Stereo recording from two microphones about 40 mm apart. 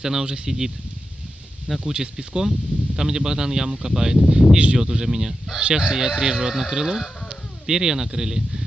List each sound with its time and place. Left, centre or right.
0.0 s speech: centre
1.9 s speech: centre